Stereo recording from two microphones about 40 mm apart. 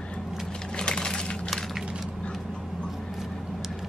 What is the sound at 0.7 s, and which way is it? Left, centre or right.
Crushing, left.